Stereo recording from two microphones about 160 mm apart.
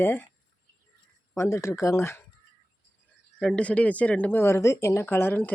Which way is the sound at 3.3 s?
5° left (ahead or behind).